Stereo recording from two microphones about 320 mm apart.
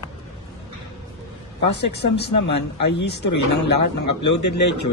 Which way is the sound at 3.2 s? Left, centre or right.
Left.